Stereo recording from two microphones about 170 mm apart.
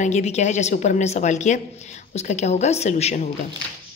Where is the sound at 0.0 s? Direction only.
40° left (ahead or behind).